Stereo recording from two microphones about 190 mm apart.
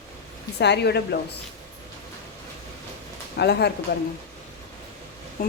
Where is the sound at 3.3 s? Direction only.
60° left (ahead or behind).